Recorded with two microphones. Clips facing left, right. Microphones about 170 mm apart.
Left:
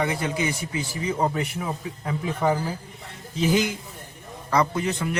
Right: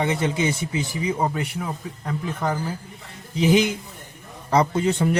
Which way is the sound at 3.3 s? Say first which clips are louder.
Right 4 dB; 15° right (ahead or behind).